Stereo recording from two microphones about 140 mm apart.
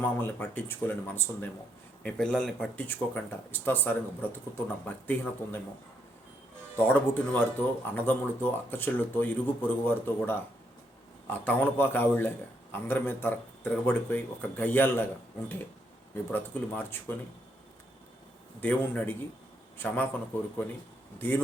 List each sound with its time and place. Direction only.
0.0 s speech: 15° left (ahead or behind)
6.7 s speech: 10° left (ahead or behind)
16.1 s speech: 15° left (ahead or behind)
18.6 s speech: 10° left (ahead or behind)
21.2 s speech: 15° left (ahead or behind)